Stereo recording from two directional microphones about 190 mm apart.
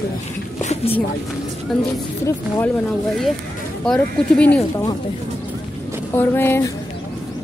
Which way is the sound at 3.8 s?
5° left (ahead or behind).